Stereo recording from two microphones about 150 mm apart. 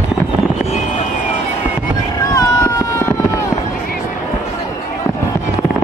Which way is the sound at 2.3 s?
20° left (ahead or behind).